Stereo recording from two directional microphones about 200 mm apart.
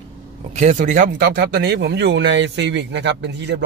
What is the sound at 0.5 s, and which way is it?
A man's voice, 35° right (ahead or behind).